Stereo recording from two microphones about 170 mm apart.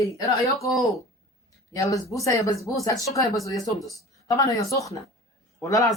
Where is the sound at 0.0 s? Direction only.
20° left (ahead or behind).